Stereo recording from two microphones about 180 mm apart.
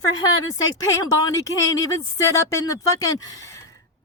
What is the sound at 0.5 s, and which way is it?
Speech, 20° left (ahead or behind).